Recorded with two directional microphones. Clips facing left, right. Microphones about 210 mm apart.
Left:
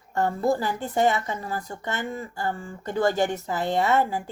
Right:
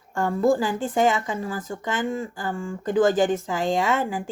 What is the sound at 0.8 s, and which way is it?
Speech, 90° right.